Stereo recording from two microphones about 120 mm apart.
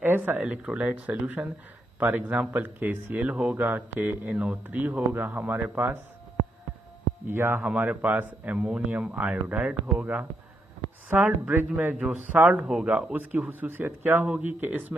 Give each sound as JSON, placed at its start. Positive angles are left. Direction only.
{"t": 0.0, "sound": "speech", "side_deg": -15}
{"t": 7.2, "sound": "speech", "side_deg": -20}